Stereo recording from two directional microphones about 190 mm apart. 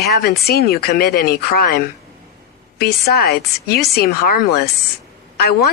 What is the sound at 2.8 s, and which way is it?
A woman's voice, 55° left (ahead or behind).